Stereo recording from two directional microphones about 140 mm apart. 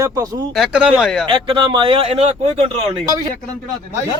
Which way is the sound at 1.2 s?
35° right (ahead or behind).